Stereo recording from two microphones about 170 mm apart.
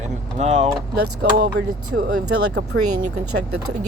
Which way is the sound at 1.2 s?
75° right (ahead or behind).